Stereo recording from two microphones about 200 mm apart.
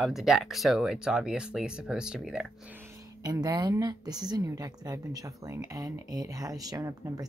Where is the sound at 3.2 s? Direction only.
20° right (ahead or behind).